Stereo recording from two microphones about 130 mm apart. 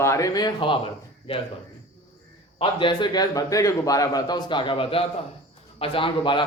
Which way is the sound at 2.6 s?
40° left (ahead or behind).